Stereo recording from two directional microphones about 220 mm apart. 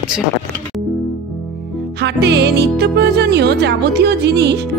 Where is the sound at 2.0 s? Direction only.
50° right (ahead or behind).